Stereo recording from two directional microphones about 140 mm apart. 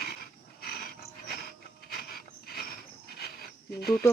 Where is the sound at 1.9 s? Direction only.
90° left.